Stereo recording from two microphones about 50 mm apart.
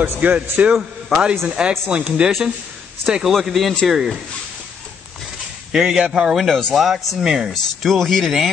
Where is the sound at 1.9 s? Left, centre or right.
Right.